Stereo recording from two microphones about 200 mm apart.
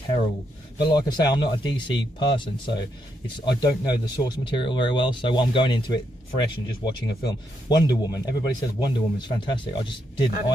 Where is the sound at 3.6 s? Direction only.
20° left (ahead or behind).